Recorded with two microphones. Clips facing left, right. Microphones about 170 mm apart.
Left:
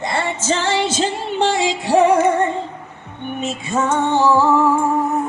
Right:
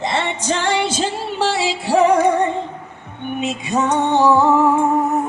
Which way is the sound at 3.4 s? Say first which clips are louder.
Right 1 dB; 15° right (ahead or behind).